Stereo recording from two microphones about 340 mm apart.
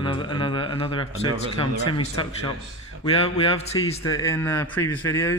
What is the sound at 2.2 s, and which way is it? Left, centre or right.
Speech, centre.